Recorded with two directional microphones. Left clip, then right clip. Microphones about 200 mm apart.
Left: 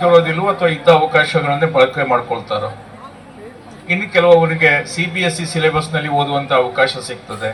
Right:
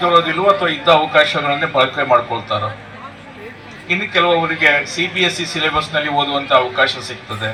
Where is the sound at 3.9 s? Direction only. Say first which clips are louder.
Left 4 dB; 30° left (ahead or behind).